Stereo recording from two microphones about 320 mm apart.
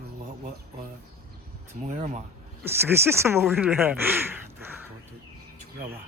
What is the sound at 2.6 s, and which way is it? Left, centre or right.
Speech, centre.